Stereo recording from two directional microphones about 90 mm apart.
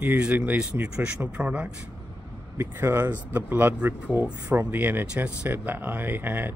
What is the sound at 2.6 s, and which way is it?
A man's voice, 25° right (ahead or behind).